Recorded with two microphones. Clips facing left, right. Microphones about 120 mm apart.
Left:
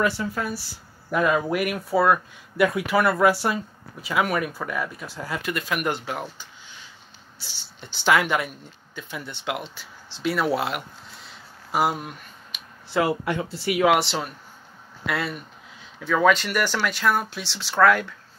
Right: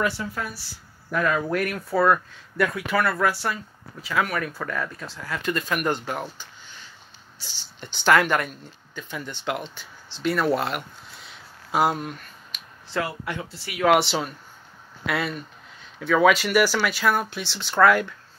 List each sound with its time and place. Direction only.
0.0 s speech: 20° left (ahead or behind); by 12.1 s 5° left (ahead or behind)
12.9 s speech: 15° left (ahead or behind); by 18.0 s centre (ahead or behind)